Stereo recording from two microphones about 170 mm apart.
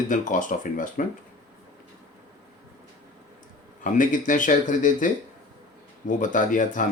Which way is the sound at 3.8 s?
50° left (ahead or behind).